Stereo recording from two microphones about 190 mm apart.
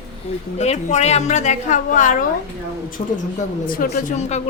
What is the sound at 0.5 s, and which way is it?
A woman's voice, 35° left (ahead or behind).